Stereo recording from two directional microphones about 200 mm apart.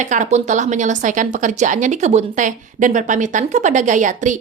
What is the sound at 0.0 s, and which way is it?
A woman's voice, 40° right (ahead or behind).